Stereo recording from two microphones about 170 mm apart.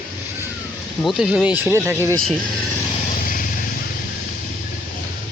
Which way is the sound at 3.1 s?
55° left (ahead or behind).